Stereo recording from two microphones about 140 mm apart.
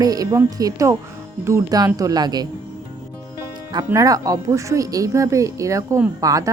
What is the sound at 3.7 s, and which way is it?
A woman's voice, 25° right (ahead or behind).